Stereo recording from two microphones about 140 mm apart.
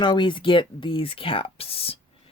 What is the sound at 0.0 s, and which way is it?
Speech, 35° left (ahead or behind).